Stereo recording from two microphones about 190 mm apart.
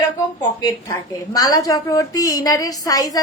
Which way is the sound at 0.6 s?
20° left (ahead or behind).